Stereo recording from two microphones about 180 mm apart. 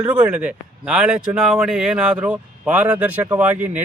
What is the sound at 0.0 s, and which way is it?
Speech, 10° right (ahead or behind).